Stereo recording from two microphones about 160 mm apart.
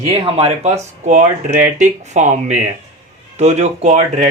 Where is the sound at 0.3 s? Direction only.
35° right (ahead or behind).